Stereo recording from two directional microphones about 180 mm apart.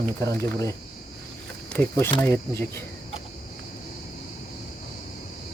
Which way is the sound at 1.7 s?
10° left (ahead or behind).